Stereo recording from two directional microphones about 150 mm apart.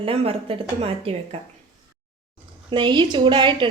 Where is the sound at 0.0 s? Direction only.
40° right (ahead or behind).